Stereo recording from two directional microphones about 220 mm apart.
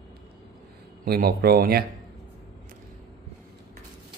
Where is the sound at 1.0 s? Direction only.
45° right (ahead or behind).